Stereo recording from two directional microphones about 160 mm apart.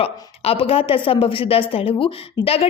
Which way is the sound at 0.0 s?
35° left (ahead or behind).